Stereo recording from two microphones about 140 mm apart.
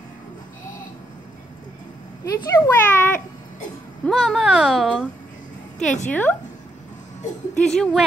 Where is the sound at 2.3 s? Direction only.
25° left (ahead or behind).